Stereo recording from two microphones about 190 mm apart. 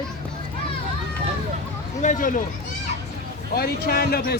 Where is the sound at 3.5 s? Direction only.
55° left (ahead or behind).